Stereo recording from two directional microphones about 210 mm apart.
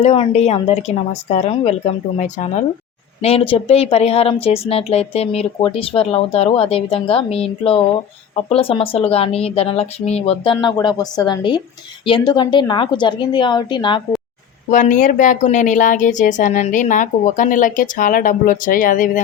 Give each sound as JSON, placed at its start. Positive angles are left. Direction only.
{"t": 0.0, "sound": "a woman's voice", "side_deg": 30}
{"t": 14.7, "sound": "speech", "side_deg": 40}